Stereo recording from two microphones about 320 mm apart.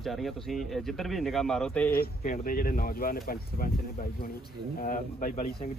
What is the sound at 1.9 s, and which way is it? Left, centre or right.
Speech, left.